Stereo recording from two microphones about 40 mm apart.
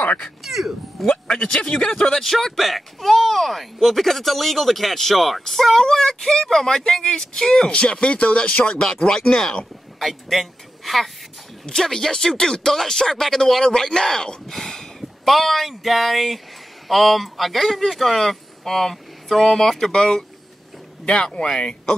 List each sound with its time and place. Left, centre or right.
0.4 s speech: centre
1.0 s speech: centre
7.7 s speech: left
8.8 s speech: centre
9.9 s a man's voice: centre
11.6 s speech: centre
21.0 s speech: left